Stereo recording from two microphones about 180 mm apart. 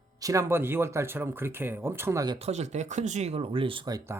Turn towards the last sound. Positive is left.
turn(degrees=-20)  # may be behind; listen again after turning